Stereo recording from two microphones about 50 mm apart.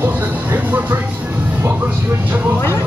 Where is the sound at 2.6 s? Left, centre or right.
Left.